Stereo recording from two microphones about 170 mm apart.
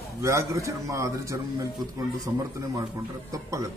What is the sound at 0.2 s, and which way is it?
A man's voice, 20° right (ahead or behind).